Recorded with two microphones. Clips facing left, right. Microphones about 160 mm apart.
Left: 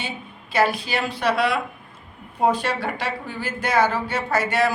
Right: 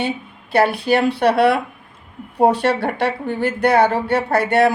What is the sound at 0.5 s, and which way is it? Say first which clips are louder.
Speech: right 6 dB; 65° right (ahead or behind).